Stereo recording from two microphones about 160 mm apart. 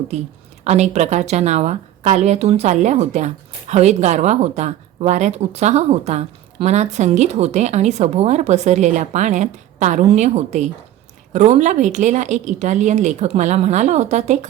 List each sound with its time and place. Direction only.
0.6 s a woman's voice: 45° right (ahead or behind)